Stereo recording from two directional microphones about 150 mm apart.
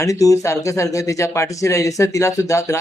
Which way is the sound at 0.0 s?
20° left (ahead or behind).